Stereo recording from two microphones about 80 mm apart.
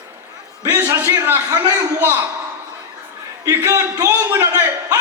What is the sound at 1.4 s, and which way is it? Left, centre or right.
Speech, right.